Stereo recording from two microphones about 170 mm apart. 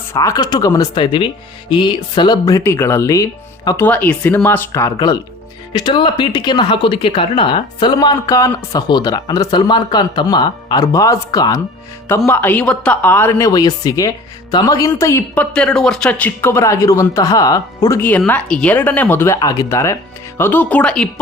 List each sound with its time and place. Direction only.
0.1 s speech: 20° left (ahead or behind)
3.8 s a man's voice: 10° left (ahead or behind)
15.5 s a man's voice: 5° left (ahead or behind)